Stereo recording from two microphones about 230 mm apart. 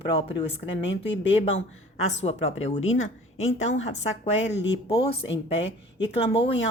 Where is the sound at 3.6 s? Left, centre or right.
Left.